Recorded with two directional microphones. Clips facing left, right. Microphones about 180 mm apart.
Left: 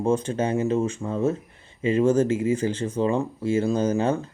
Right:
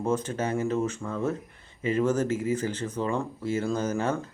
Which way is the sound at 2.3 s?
10° left (ahead or behind).